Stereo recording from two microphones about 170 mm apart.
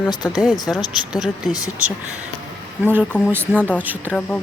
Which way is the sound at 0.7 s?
5° right (ahead or behind).